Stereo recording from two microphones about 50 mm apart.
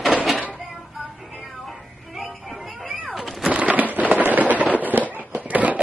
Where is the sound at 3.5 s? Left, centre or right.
Right.